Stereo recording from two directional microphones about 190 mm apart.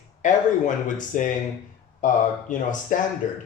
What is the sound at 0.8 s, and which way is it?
A man's voice, 45° left (ahead or behind).